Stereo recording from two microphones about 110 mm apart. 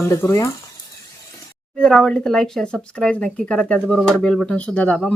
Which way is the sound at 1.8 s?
5° left (ahead or behind).